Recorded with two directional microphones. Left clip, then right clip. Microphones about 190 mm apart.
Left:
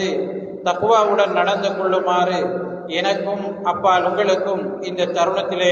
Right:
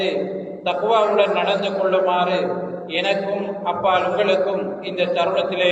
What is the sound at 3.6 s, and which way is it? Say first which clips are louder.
A man's voice: left 3 dB; 30° left (ahead or behind).